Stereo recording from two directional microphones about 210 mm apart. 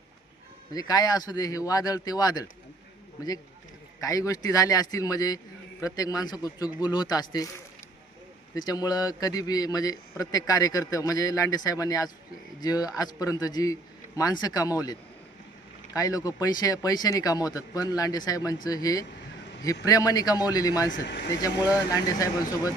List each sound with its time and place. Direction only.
0.7 s a man's voice: 20° left (ahead or behind)
4.0 s a man's voice: 15° left (ahead or behind)
8.5 s a man's voice: 20° left (ahead or behind)
16.0 s a man's voice: 15° left (ahead or behind)
20.9 s speech: 55° left (ahead or behind)
21.4 s a man's voice: 15° left (ahead or behind)